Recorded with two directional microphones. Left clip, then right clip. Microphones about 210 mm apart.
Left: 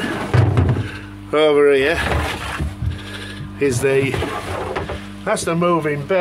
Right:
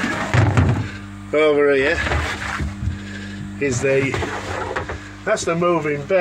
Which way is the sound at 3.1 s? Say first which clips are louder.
Left 2 dB; 10° left (ahead or behind).